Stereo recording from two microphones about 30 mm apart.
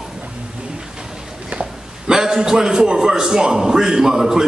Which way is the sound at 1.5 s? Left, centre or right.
Right.